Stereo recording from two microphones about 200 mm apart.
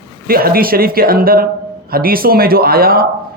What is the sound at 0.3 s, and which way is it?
Speech, 50° right (ahead or behind).